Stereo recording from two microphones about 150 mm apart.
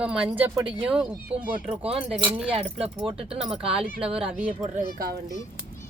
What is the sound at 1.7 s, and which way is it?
Speech, 40° right (ahead or behind).